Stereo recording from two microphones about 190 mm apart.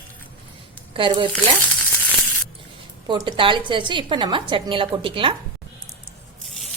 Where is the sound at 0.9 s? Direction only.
25° right (ahead or behind).